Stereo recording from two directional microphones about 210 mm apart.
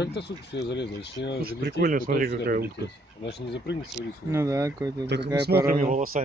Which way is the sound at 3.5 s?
55° left (ahead or behind).